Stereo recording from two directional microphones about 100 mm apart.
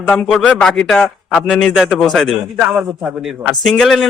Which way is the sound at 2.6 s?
10° right (ahead or behind).